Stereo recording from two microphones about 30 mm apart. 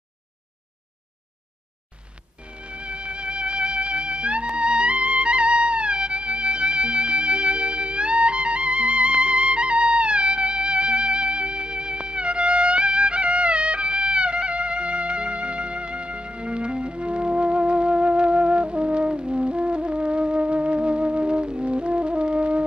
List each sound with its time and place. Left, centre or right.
2.4 s music: right